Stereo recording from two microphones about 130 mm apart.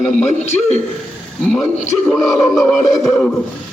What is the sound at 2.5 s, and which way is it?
Music, centre (ahead or behind).